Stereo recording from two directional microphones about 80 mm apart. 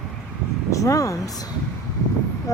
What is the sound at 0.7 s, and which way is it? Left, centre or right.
Speech, left.